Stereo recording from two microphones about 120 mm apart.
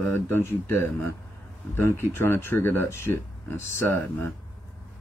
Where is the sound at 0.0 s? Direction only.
20° left (ahead or behind).